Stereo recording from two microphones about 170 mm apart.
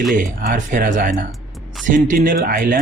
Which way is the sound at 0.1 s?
50° right (ahead or behind).